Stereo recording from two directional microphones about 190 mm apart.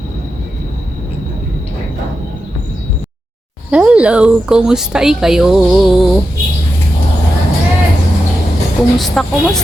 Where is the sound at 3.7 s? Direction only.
5° right (ahead or behind).